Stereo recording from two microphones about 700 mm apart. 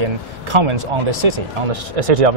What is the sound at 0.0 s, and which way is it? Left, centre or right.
Speech, right.